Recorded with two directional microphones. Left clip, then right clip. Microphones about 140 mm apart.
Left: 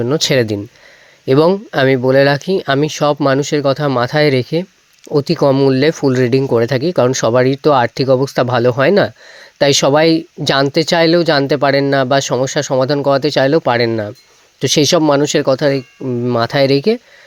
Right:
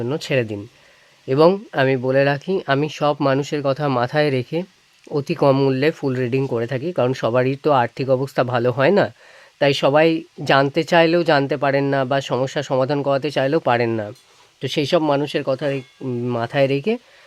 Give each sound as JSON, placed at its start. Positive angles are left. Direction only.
{"t": 0.0, "sound": "speech", "side_deg": 40}
{"t": 14.6, "sound": "speech", "side_deg": 40}
{"t": 16.0, "sound": "speech", "side_deg": 25}
{"t": 16.4, "sound": "speech", "side_deg": 35}